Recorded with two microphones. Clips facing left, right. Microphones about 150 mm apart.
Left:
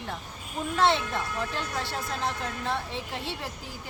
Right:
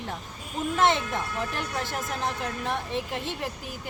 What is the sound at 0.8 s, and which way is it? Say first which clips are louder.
Speech: even; 15° right (ahead or behind).